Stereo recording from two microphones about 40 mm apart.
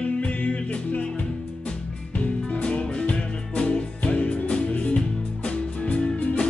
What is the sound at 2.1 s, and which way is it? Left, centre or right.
Music, left.